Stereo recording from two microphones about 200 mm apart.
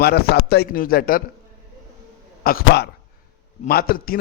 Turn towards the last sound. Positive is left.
turn(degrees=45)  # may be behind; listen again after turning